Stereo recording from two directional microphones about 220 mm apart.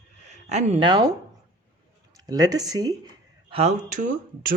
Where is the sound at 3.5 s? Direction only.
30° right (ahead or behind).